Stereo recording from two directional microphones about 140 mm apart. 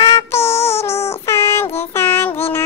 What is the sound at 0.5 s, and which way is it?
Child singing, 45° left (ahead or behind).